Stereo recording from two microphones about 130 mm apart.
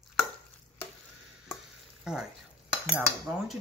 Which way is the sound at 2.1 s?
5° right (ahead or behind).